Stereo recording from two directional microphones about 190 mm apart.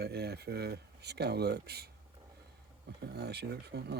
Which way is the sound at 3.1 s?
60° right (ahead or behind).